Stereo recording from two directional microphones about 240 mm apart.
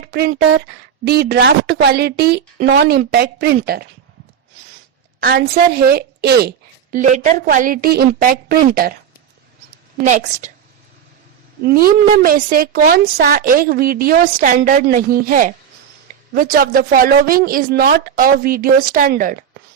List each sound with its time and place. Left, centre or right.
0.0 s a woman's voice: right
5.2 s a woman's voice: right
10.0 s a woman's voice: right
11.6 s a woman's voice: right